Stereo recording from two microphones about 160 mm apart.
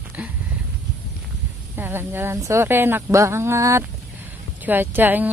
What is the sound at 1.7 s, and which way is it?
Speech, 15° right (ahead or behind).